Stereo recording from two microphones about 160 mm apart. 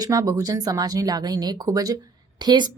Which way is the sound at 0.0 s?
20° right (ahead or behind).